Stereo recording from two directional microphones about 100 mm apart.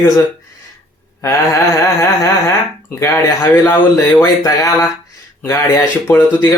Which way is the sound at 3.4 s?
25° left (ahead or behind).